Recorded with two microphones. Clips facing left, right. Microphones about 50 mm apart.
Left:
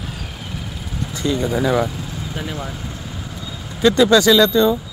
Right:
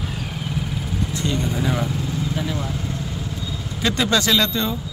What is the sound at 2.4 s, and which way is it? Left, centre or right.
Speech, centre.